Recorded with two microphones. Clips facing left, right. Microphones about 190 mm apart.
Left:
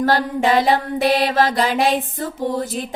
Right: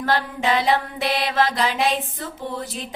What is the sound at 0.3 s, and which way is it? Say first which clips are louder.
Music: left 3 dB; 45° left (ahead or behind).